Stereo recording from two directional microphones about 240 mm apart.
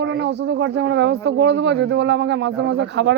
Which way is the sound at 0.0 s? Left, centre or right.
Right.